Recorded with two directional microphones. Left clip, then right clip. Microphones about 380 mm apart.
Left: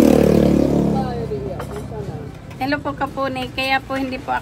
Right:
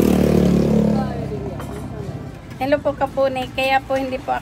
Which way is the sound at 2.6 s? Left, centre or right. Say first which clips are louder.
Right 3 dB; centre.